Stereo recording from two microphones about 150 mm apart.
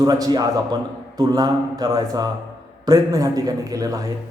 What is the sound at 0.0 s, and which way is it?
A man's voice, 25° right (ahead or behind).